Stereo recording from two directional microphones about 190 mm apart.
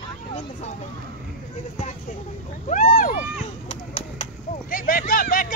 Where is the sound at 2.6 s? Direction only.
40° left (ahead or behind).